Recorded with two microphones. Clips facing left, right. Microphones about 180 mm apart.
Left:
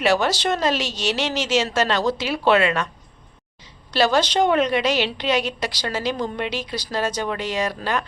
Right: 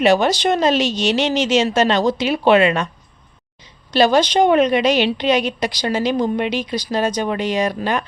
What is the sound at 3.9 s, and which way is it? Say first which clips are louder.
A woman's voice: right 5 dB; 15° right (ahead or behind).